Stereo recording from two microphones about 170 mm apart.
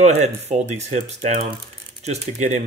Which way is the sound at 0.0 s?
40° right (ahead or behind).